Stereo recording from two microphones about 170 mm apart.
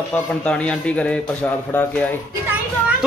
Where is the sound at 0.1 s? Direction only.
5° left (ahead or behind).